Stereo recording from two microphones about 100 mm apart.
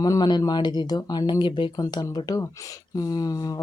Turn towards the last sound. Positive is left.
turn(degrees=35)  # may be behind; listen again after turning